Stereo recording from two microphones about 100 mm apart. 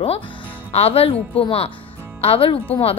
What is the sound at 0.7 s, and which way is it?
A woman's voice, 85° left.